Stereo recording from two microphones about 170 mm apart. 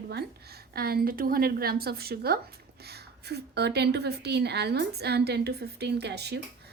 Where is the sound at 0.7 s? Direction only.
65° right (ahead or behind).